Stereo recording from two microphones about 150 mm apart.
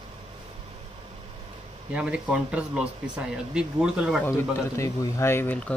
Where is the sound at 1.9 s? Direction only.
5° right (ahead or behind).